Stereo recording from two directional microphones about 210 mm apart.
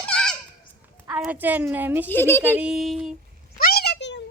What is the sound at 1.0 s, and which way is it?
A woman's voice, 5° right (ahead or behind).